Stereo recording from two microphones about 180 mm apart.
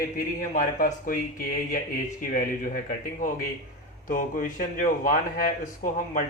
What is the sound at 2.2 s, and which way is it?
Speech, 50° left (ahead or behind).